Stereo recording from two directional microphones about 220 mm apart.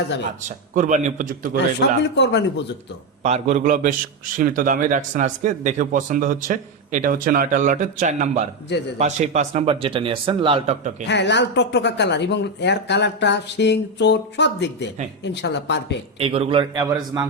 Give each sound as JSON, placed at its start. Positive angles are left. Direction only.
{"t": 0.4, "sound": "speech", "side_deg": -35}
{"t": 1.5, "sound": "speech", "side_deg": 50}
{"t": 3.2, "sound": "speech", "side_deg": -30}
{"t": 11.0, "sound": "speech", "side_deg": 50}
{"t": 16.1, "sound": "speech", "side_deg": -25}